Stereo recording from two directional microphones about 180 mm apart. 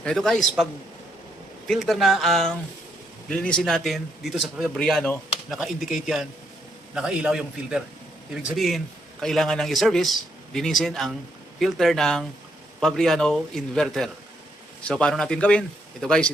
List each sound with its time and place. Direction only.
0.0 s a man's voice: centre (ahead or behind)